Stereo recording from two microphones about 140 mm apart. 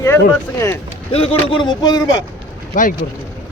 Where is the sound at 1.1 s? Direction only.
40° left (ahead or behind).